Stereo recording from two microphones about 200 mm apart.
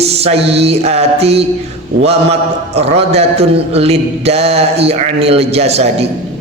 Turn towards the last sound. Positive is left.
turn(degrees=-30)  # may be behind; listen again after turning